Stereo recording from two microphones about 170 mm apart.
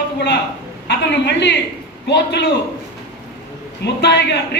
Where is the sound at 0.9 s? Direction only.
90° left.